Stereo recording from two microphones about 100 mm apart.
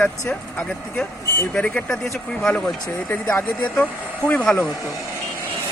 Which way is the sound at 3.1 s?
15° left (ahead or behind).